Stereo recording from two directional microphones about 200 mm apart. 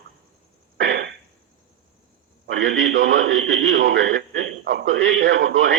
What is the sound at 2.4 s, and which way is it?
A man's voice, 70° right (ahead or behind).